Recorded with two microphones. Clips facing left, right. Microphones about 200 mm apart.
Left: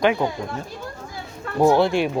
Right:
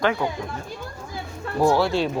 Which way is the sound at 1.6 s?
20° left (ahead or behind).